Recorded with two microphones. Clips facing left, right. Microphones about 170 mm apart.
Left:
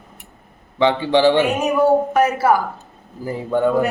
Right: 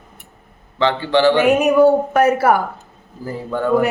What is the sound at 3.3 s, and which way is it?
Speech, 15° left (ahead or behind).